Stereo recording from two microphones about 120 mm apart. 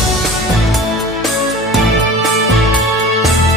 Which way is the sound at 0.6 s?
Centre (ahead or behind).